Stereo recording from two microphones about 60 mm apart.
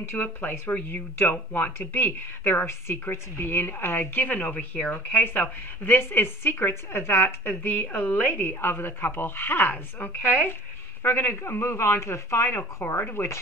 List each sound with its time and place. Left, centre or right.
0.2 s a woman's voice: left
11.0 s speech: left